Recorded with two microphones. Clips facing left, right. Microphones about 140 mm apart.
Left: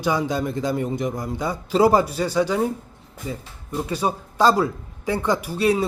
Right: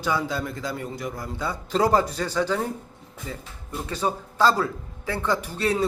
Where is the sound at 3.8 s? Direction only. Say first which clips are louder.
Left 1 dB; 10° left (ahead or behind).